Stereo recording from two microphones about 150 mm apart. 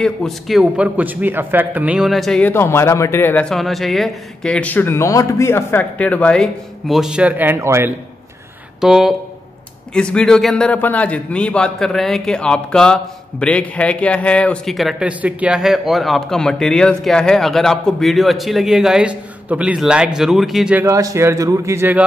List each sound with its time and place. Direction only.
0.0 s a man's voice: centre (ahead or behind)
2.5 s a man's voice: 15° left (ahead or behind); by 7.9 s 15° right (ahead or behind)
8.8 s a man's voice: 5° right (ahead or behind)
20.8 s a man's voice: 20° right (ahead or behind)